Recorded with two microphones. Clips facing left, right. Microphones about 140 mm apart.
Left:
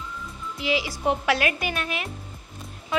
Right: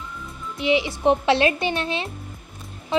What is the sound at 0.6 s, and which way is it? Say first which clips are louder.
Speech: right 5 dB; 25° right (ahead or behind).